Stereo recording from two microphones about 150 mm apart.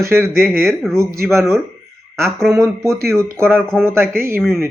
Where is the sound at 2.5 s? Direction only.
20° right (ahead or behind).